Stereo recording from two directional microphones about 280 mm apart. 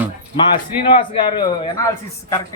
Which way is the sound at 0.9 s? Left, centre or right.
Centre.